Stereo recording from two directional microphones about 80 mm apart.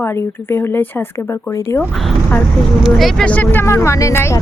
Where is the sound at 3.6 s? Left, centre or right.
Left.